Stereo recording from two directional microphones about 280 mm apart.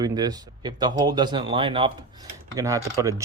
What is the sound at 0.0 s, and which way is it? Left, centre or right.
Speech, centre.